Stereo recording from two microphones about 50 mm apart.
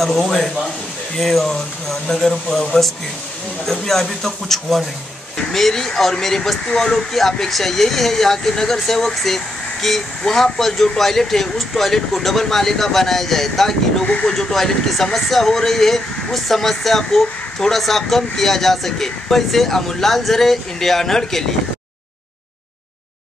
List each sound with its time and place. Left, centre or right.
0.0 s speech: centre
14.0 s speech: left
14.3 s speech: centre